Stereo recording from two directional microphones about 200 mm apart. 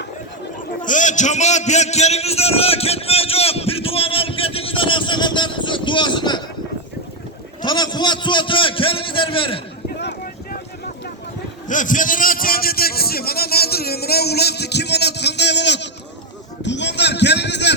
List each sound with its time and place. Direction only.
0.8 s a man's voice: 40° left (ahead or behind); by 6.4 s 20° left (ahead or behind)
7.6 s a man's voice: 20° left (ahead or behind)
10.0 s a sound: 55° left (ahead or behind)
11.7 s a man's voice: 40° left (ahead or behind); by 17.7 s 60° left (ahead or behind)